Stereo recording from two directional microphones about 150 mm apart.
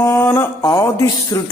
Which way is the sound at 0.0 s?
15° left (ahead or behind).